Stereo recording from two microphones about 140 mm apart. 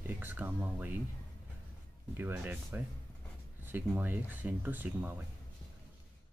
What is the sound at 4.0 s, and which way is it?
Speech, 15° right (ahead or behind).